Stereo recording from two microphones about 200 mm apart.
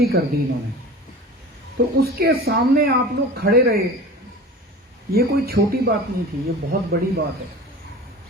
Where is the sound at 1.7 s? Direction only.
50° right (ahead or behind).